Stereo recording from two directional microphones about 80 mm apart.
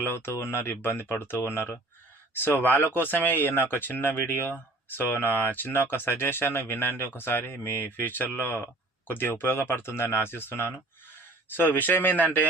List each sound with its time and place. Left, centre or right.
0.0 s speech: left